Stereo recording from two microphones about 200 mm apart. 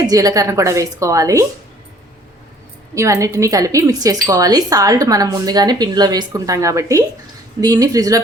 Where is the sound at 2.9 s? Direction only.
15° right (ahead or behind).